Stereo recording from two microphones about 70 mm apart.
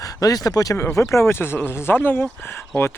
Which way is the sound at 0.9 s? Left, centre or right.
Left.